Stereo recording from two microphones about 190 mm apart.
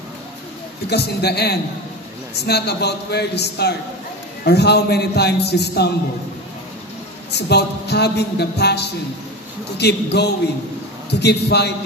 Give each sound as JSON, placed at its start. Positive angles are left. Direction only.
{"t": 0.8, "sound": "speech", "side_deg": 60}
{"t": 7.3, "sound": "speech", "side_deg": 60}